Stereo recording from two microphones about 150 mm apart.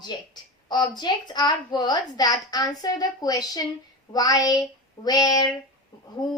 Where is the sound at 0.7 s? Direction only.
30° left (ahead or behind).